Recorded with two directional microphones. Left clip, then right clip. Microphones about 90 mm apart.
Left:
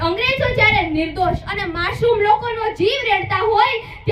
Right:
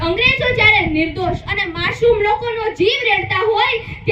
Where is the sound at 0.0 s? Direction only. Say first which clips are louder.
Right 3 dB; 55° left (ahead or behind).